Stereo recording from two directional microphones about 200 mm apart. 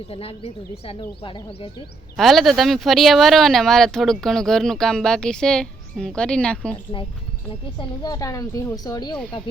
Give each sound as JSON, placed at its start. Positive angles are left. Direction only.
{"t": 0.1, "sound": "a woman's voice", "side_deg": 30}
{"t": 2.1, "sound": "speech", "side_deg": 0}
{"t": 7.8, "sound": "a woman's voice", "side_deg": 20}